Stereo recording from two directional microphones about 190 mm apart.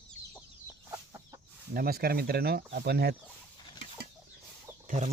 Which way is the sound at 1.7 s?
50° right (ahead or behind).